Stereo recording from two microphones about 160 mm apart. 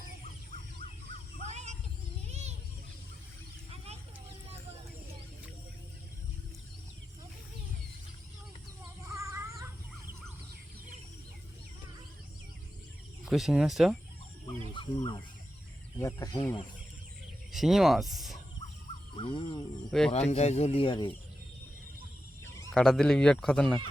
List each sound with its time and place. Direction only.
1.4 s a sound: 45° right (ahead or behind)
2.3 s music: 45° right (ahead or behind)
9.0 s child singing: 20° right (ahead or behind)
13.2 s speech: centre (ahead or behind)
14.7 s a sound: 30° left (ahead or behind)
16.0 s speech: 20° left (ahead or behind)
17.5 s speech: centre (ahead or behind)
19.1 s music: 35° left (ahead or behind)
19.9 s speech: 5° left (ahead or behind)
20.3 s speech: 45° left (ahead or behind)
22.7 s speech: 5° left (ahead or behind)